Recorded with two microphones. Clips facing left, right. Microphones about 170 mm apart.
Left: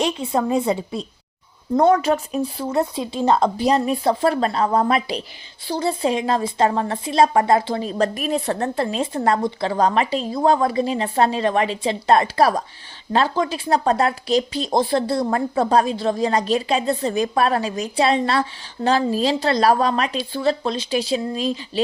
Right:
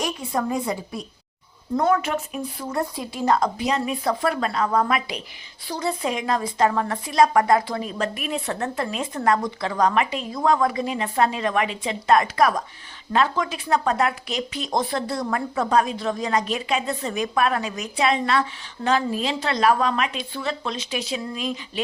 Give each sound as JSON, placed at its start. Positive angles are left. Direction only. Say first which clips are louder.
{"t": 0.0, "sound": "speech", "louder": "left 5 dB", "side_deg": 25}